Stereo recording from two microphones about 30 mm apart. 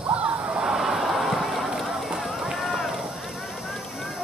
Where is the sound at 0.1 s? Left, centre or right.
Right.